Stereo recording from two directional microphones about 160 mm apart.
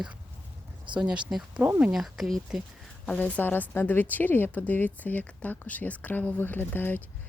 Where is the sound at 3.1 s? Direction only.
10° left (ahead or behind).